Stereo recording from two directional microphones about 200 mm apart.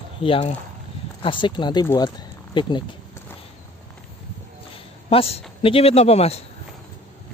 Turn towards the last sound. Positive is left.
turn(degrees=30)  # may be behind; listen again after turning